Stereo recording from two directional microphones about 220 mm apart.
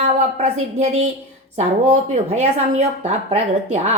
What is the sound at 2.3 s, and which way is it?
Speech, 30° right (ahead or behind).